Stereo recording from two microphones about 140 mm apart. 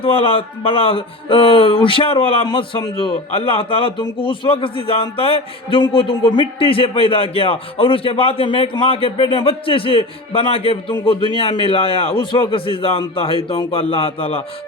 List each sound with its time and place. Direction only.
0.0 s speech: 40° left (ahead or behind)